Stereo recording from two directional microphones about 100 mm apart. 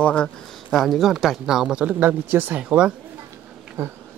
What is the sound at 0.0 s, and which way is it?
Speech, 10° left (ahead or behind).